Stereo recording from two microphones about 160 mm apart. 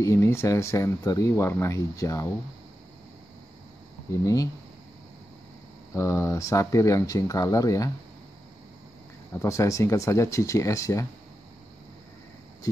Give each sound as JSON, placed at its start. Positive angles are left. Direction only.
{"t": 0.0, "sound": "speech", "side_deg": 15}
{"t": 4.2, "sound": "speech", "side_deg": 20}
{"t": 5.9, "sound": "speech", "side_deg": 20}
{"t": 9.3, "sound": "speech", "side_deg": 15}